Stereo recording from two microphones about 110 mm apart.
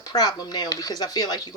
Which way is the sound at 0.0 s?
40° left (ahead or behind).